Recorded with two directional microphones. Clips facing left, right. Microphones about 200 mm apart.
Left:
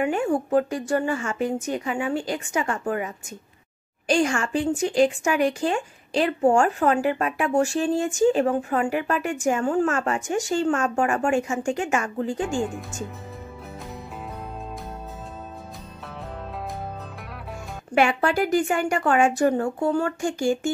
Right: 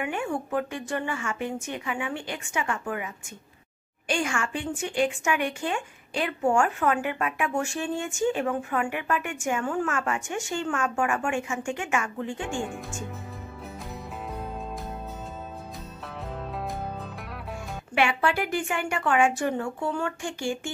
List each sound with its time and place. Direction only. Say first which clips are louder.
0.0 s speech: left 7 dB; 35° left (ahead or behind)
4.1 s speech: left 6 dB; 35° left (ahead or behind)
12.5 s speech: left 5 dB; centre (ahead or behind)
17.9 s speech: left 4 dB; 40° left (ahead or behind)